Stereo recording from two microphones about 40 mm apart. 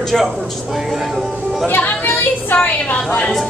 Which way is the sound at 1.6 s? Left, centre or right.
Left.